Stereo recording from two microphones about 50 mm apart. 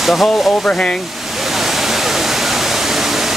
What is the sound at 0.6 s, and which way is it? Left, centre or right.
Speech, centre.